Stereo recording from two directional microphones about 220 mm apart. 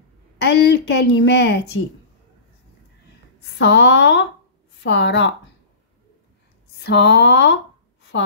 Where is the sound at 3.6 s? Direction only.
50° left (ahead or behind).